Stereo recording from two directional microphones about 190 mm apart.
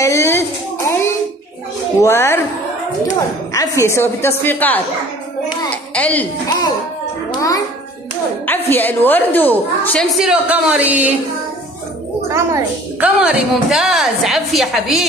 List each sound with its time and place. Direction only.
0.0 s a sound: 15° left (ahead or behind)
2.0 s a woman's voice: 15° left (ahead or behind)
3.5 s a woman's voice: 15° left (ahead or behind)
7.2 s music: 20° left (ahead or behind)
8.5 s a woman's voice: 10° left (ahead or behind)
10.1 s speech: 5° right (ahead or behind)
12.3 s speech: 15° right (ahead or behind)
13.2 s a woman's voice: centre (ahead or behind)